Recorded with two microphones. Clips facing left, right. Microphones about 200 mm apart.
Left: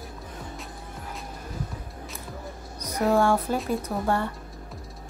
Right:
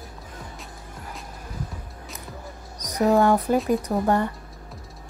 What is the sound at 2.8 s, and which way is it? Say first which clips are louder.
Speech: right 3 dB; 15° right (ahead or behind).